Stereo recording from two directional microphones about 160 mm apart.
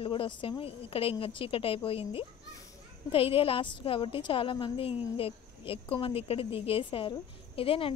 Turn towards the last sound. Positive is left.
turn(degrees=35)  # may be behind; listen again after turning